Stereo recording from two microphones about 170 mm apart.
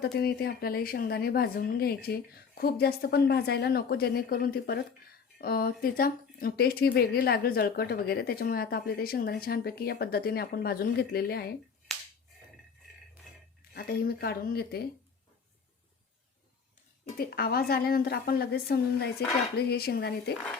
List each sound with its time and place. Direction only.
0.2 s speech: 65° left (ahead or behind)
11.9 s finger snapping: centre (ahead or behind)
13.7 s speech: 65° left (ahead or behind)
17.2 s speech: 65° left (ahead or behind)